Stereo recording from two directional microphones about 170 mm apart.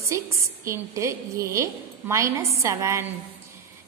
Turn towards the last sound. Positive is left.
turn(degrees=-15)  # may be behind; listen again after turning